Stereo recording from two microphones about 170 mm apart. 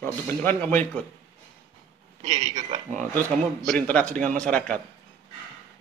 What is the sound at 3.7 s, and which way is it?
Speech, 5° left (ahead or behind).